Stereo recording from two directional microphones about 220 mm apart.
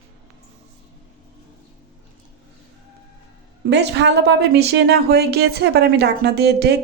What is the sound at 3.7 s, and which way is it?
A woman's voice, 50° right (ahead or behind).